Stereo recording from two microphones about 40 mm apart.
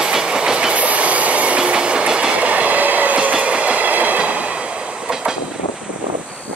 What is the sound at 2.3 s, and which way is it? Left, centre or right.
Train, right.